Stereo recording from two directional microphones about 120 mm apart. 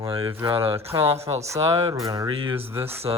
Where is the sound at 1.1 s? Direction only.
20° right (ahead or behind).